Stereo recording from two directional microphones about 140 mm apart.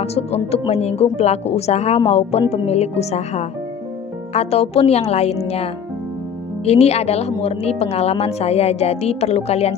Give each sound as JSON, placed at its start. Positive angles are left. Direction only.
{"t": 0.0, "sound": "a woman's voice", "side_deg": 50}